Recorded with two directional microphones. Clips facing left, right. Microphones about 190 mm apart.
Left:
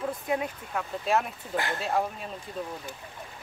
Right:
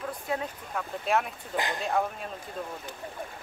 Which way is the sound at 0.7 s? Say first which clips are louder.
Left 1 dB; centre (ahead or behind).